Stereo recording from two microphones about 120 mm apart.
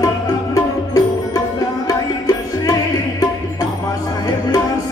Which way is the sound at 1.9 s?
30° left (ahead or behind).